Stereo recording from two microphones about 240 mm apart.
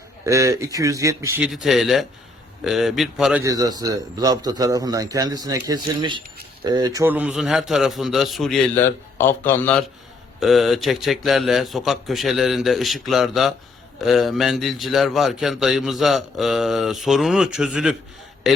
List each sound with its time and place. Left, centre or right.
0.3 s a man's voice: centre
1.6 s a man's voice: centre
3.4 s a man's voice: centre